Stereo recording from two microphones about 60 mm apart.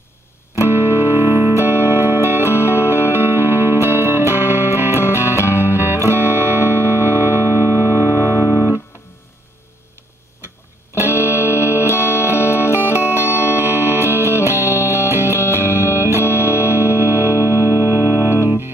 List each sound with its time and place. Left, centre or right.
0.6 s music: right
11.0 s music: right
12.6 s music: left
13.6 s music: right
15.2 s music: left
16.4 s music: right